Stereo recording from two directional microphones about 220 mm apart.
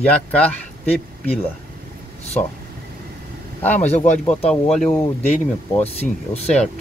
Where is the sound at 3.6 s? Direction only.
10° left (ahead or behind).